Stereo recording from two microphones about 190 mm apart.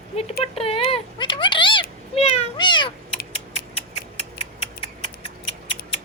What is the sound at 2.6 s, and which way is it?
Cat, 25° left (ahead or behind).